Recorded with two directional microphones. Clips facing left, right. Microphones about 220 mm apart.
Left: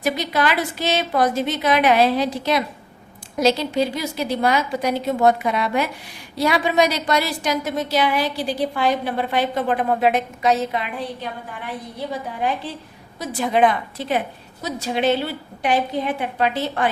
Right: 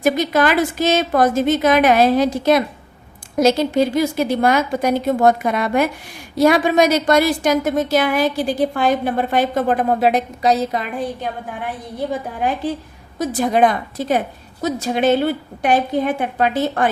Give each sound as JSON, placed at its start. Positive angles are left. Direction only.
{"t": 0.0, "sound": "a woman's voice", "side_deg": -45}
{"t": 13.1, "sound": "a woman's voice", "side_deg": -45}